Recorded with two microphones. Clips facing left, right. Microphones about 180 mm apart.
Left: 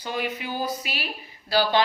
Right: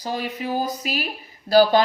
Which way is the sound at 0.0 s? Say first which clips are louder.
Right 2 dB; 35° right (ahead or behind).